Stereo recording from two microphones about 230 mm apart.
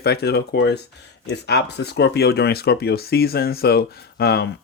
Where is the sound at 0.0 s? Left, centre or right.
Left.